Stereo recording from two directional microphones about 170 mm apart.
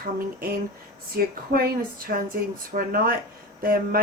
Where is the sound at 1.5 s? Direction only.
60° right (ahead or behind).